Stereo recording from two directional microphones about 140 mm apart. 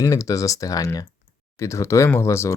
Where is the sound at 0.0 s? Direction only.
25° left (ahead or behind).